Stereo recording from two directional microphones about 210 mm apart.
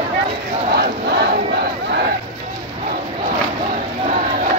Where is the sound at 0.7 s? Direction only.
50° right (ahead or behind).